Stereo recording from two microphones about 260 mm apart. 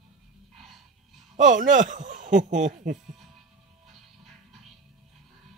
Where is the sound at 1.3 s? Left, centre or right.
Right.